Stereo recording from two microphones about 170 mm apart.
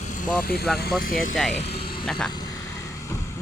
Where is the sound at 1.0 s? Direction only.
55° left (ahead or behind).